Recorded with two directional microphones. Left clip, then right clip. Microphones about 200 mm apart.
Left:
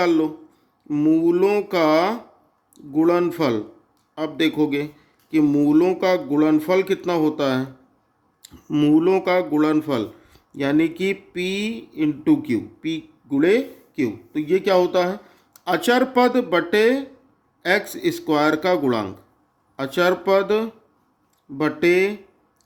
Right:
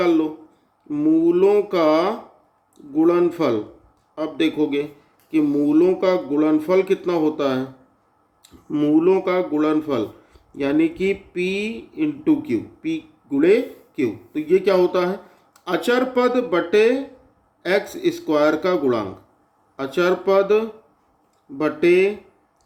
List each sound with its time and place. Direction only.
0.0 s speech: 40° left (ahead or behind)